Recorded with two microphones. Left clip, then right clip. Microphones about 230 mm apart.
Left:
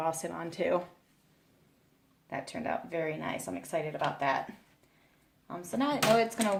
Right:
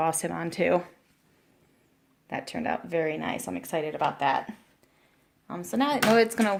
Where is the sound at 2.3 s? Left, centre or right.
Right.